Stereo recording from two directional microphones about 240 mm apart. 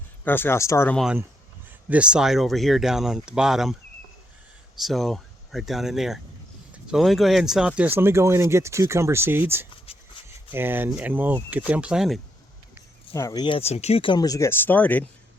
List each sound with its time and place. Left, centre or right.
0.3 s speech: centre
4.8 s speech: centre
13.1 s speech: centre